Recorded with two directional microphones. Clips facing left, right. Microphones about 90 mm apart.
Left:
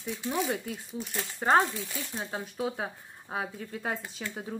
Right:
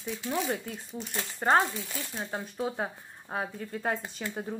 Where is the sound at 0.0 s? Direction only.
5° left (ahead or behind).